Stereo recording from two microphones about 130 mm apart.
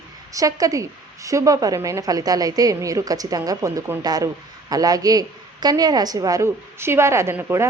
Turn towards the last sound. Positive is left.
turn(degrees=-15)  # may be behind; listen again after turning